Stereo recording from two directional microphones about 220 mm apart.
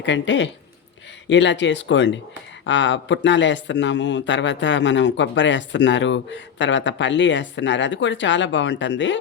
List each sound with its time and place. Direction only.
0.0 s a man's voice: 55° left (ahead or behind)